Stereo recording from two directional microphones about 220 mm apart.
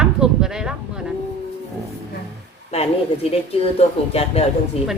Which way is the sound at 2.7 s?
25° left (ahead or behind).